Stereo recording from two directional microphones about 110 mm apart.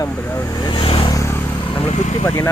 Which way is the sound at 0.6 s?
45° left (ahead or behind).